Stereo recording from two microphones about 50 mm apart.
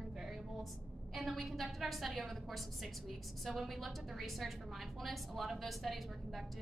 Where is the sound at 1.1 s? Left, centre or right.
Centre.